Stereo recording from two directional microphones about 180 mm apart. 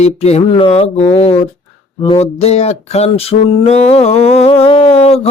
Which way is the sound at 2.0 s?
30° left (ahead or behind).